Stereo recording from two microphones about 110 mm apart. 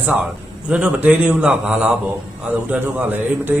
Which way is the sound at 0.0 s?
15° right (ahead or behind).